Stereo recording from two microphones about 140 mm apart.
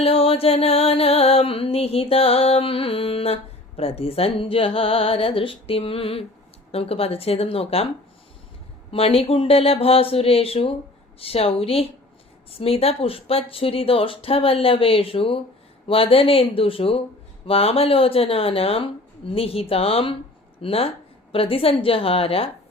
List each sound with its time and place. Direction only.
0.0 s music: 45° left (ahead or behind)
3.8 s speech: 45° left (ahead or behind)
6.7 s music: 45° left (ahead or behind)
8.9 s music: 40° left (ahead or behind)
15.9 s speech: 40° left (ahead or behind)
17.4 s music: 45° left (ahead or behind)